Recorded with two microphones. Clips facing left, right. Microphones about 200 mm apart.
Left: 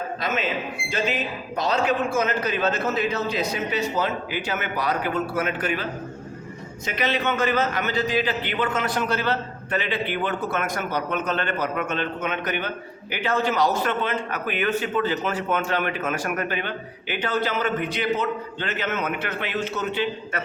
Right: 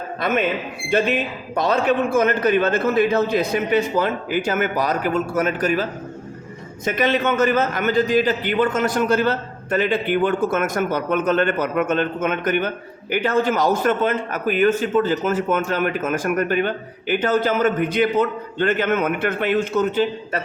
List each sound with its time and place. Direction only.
0.2 s a man's voice: 55° right (ahead or behind)